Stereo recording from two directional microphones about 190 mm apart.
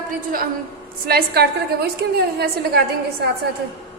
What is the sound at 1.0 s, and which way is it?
A woman's voice, 55° right (ahead or behind).